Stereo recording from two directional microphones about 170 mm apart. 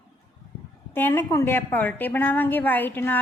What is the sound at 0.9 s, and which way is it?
A woman's voice, 10° left (ahead or behind).